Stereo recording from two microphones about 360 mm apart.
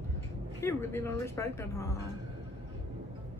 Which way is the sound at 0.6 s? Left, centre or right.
Centre.